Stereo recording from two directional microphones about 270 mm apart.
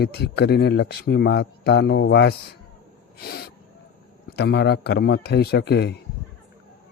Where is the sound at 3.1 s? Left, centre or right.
Left.